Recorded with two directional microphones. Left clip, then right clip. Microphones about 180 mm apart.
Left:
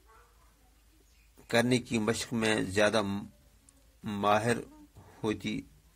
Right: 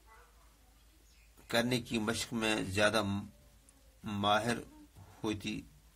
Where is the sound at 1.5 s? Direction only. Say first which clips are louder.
Left 5 dB; 30° left (ahead or behind).